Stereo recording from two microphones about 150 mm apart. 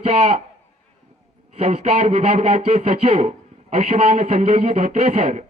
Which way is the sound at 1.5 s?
45° right (ahead or behind).